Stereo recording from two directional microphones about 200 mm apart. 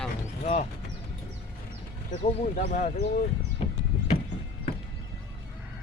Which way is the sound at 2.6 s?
40° left (ahead or behind).